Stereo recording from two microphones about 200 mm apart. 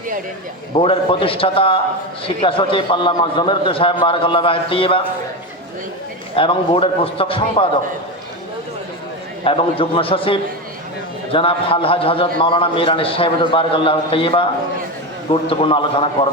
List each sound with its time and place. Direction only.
0.8 s a man's voice: 25° left (ahead or behind)
6.3 s a man's voice: 25° left (ahead or behind)
9.4 s a man's voice: 25° left (ahead or behind)